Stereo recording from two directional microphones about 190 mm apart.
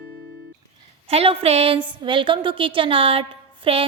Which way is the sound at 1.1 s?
30° right (ahead or behind).